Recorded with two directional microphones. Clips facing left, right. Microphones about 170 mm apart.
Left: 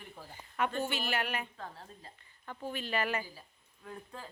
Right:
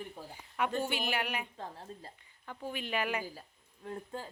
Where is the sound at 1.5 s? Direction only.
25° right (ahead or behind).